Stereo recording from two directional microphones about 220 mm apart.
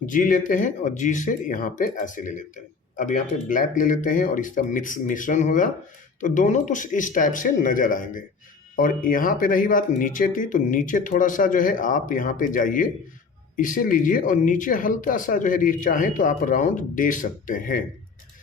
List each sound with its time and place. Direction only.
0.0 s speech: 40° left (ahead or behind)